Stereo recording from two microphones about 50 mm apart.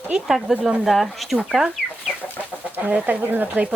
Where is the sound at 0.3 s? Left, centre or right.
Centre.